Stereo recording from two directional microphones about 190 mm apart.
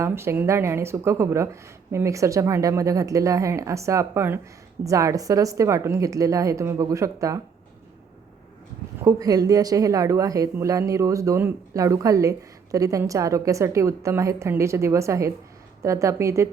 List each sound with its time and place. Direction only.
0.0 s a woman's voice: 15° right (ahead or behind)
9.0 s a woman's voice: 15° right (ahead or behind)